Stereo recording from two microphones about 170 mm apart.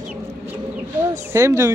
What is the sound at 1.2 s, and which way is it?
Speech, 15° right (ahead or behind).